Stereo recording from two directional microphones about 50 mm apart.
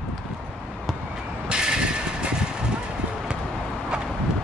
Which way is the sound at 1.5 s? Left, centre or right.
Centre.